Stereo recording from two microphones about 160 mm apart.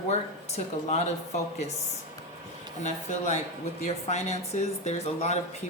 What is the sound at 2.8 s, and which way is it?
A woman's voice, 45° left (ahead or behind).